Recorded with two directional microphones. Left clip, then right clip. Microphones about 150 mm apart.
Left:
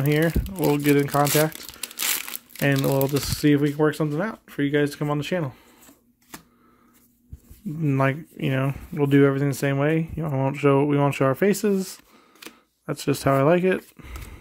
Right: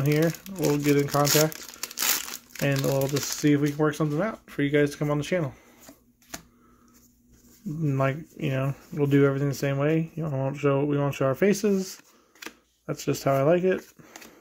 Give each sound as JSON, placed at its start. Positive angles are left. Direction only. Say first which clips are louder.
{"t": 0.1, "sound": "speech", "louder": "left 2 dB", "side_deg": 15}
{"t": 0.7, "sound": "speech", "louder": "left 3 dB", "side_deg": 25}
{"t": 1.1, "sound": "speech", "louder": "left 2 dB", "side_deg": 5}
{"t": 2.6, "sound": "speech", "louder": "left 4 dB", "side_deg": 20}
{"t": 3.3, "sound": "speech", "louder": "left 3 dB", "side_deg": 35}
{"t": 7.8, "sound": "speech", "louder": "left 4 dB", "side_deg": 25}
{"t": 11.3, "sound": "speech", "louder": "left 2 dB", "side_deg": 15}